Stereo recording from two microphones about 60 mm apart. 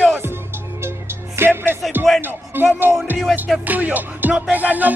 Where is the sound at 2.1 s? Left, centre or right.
Centre.